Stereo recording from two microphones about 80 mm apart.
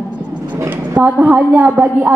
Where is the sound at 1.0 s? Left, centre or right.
Centre.